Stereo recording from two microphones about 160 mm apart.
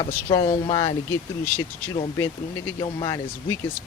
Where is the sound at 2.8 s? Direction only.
25° left (ahead or behind).